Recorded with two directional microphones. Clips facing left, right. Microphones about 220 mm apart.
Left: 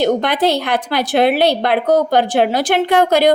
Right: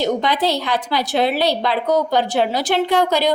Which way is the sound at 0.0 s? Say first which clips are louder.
Left 4 dB; 55° left (ahead or behind).